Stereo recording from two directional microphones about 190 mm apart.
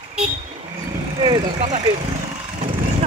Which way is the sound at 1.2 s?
20° right (ahead or behind).